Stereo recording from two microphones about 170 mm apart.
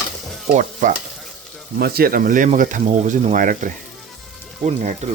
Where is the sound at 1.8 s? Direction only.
65° right (ahead or behind); by 5.1 s 40° right (ahead or behind).